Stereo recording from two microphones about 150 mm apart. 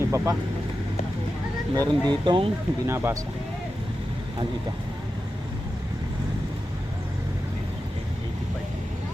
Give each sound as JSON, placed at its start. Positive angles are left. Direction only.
{"t": 0.0, "sound": "speech", "side_deg": -20}
{"t": 1.7, "sound": "speech", "side_deg": -25}
{"t": 2.8, "sound": "speech", "side_deg": -15}